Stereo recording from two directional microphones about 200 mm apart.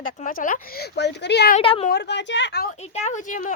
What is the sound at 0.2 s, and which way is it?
Speech, 40° left (ahead or behind).